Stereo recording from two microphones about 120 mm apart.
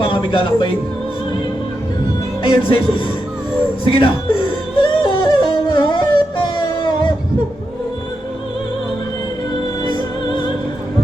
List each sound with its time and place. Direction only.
0.0 s speech: 45° left (ahead or behind)
2.4 s music: 45° left (ahead or behind)
9.8 s music: 40° left (ahead or behind)